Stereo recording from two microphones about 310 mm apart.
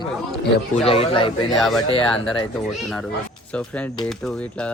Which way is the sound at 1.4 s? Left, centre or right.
Centre.